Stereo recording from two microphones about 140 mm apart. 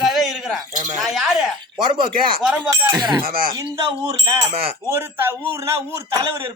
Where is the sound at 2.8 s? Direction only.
25° right (ahead or behind).